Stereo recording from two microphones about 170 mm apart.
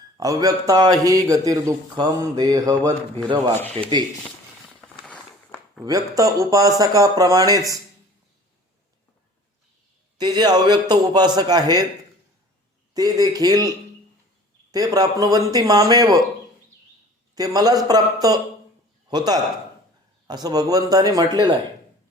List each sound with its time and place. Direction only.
0.2 s a man's voice: 20° right (ahead or behind)
3.8 s speech: 35° right (ahead or behind)
5.0 s a sound: 5° left (ahead or behind)
5.8 s a man's voice: 20° right (ahead or behind)
10.2 s a man's voice: 25° right (ahead or behind)
12.9 s a man's voice: 20° right (ahead or behind)
17.3 s a man's voice: 20° right (ahead or behind)